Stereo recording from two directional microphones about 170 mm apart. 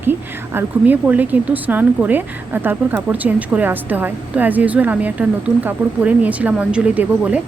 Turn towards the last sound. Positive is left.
turn(degrees=-10)  # may be behind; listen again after turning